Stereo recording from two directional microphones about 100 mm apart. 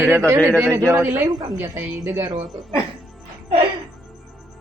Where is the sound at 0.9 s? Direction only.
25° right (ahead or behind).